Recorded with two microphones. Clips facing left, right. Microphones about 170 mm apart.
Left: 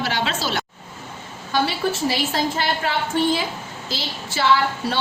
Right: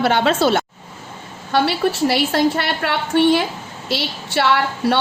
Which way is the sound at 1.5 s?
65° right (ahead or behind).